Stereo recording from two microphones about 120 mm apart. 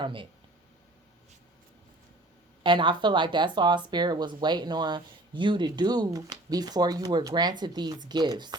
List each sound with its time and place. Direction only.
0.0 s speech: 45° right (ahead or behind)
2.6 s speech: 40° right (ahead or behind)